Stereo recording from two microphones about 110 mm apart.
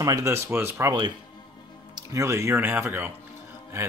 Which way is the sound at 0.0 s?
30° right (ahead or behind).